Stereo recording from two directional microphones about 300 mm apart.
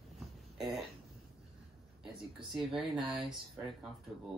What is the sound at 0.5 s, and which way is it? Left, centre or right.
Speech, centre.